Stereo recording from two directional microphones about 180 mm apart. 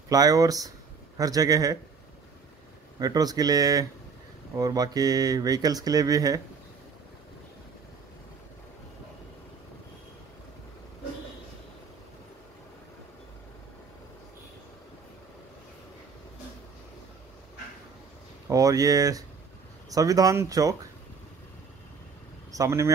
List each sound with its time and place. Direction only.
0.1 s speech: 20° right (ahead or behind)
3.0 s speech: 20° right (ahead or behind)
18.5 s speech: 20° right (ahead or behind)
22.5 s speech: 15° right (ahead or behind)